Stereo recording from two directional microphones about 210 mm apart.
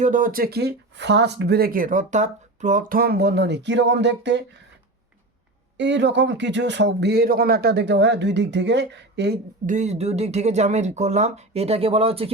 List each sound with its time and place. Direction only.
0.0 s speech: 40° right (ahead or behind); by 4.4 s 55° right (ahead or behind)
5.7 s speech: 55° right (ahead or behind)
9.6 s speech: 35° right (ahead or behind)